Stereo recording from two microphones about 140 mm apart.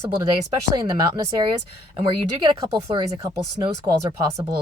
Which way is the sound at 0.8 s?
30° right (ahead or behind).